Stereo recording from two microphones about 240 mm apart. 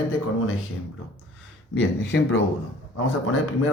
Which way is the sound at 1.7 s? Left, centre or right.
Left.